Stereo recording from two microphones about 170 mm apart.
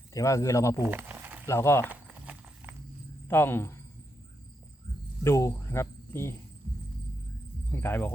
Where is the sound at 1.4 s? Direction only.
15° left (ahead or behind).